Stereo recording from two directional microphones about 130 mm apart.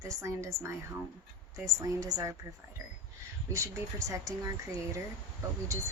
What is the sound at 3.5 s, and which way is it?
Speech, 25° right (ahead or behind).